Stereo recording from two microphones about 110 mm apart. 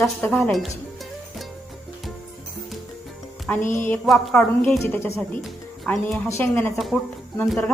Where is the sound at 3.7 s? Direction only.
15° left (ahead or behind).